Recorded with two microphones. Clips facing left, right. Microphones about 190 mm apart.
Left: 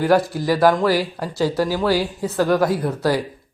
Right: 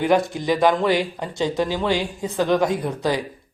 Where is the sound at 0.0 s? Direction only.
5° left (ahead or behind).